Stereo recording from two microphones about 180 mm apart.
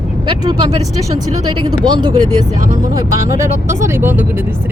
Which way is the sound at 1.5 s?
25° right (ahead or behind).